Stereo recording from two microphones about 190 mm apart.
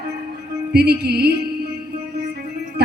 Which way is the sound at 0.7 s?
55° right (ahead or behind).